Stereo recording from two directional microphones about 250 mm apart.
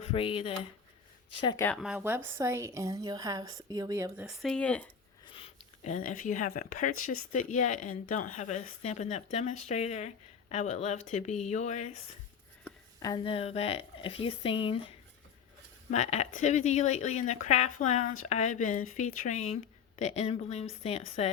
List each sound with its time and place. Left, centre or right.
0.0 s speech: left
1.6 s a woman's voice: centre
4.3 s speech: centre
5.2 s speech: left
12.6 s speech: centre